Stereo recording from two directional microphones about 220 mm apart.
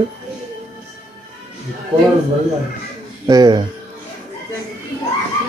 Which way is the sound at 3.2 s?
20° right (ahead or behind).